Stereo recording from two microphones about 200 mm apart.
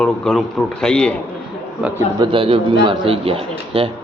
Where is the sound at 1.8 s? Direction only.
5° right (ahead or behind).